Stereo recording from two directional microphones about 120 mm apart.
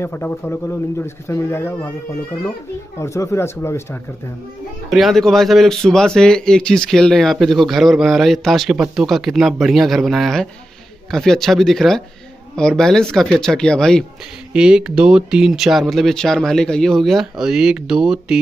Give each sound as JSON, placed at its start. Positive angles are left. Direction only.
{"t": 0.0, "sound": "speech", "side_deg": 15}
{"t": 3.0, "sound": "speech", "side_deg": 25}
{"t": 4.9, "sound": "speech", "side_deg": 0}
{"t": 14.5, "sound": "speech", "side_deg": -5}